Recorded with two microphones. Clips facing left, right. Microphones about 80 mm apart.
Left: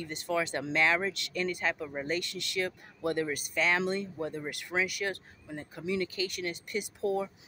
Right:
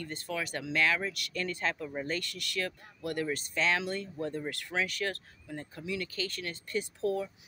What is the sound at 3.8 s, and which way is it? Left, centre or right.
Speech, left.